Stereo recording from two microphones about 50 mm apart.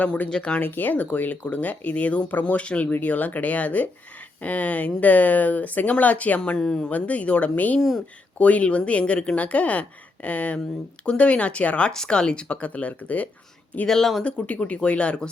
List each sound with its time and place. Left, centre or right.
0.0 s speech: left
0.3 s speech: centre
0.6 s speech: left
6.6 s speech: centre
6.9 s speech: left
7.8 s speech: centre
8.4 s speech: left
13.8 s speech: centre
14.3 s speech: left